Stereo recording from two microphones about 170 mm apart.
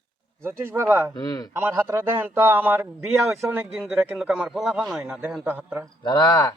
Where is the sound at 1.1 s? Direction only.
25° left (ahead or behind).